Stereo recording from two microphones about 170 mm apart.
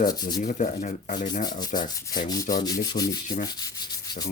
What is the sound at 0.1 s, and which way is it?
Rub, 20° left (ahead or behind).